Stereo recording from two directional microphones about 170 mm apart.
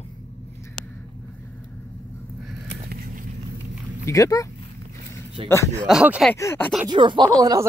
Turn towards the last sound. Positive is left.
turn(degrees=-20)  # may be behind; listen again after turning